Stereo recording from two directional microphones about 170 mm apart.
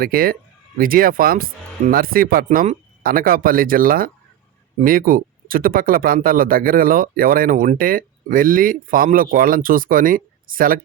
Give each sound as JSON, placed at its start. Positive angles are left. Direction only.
{"t": 0.0, "sound": "speech", "side_deg": -60}